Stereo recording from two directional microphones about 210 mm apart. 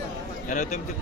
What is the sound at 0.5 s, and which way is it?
Speech, 35° left (ahead or behind).